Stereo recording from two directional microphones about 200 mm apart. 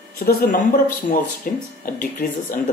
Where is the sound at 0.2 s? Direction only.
50° left (ahead or behind).